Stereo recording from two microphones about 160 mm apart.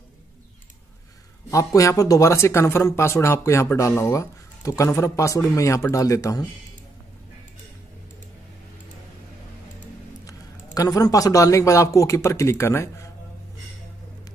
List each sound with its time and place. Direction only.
1.5 s speech: 20° left (ahead or behind)
10.2 s speech: 25° left (ahead or behind)